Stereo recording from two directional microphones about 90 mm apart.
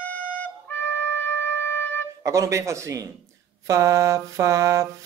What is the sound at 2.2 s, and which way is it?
Mantra, 35° right (ahead or behind).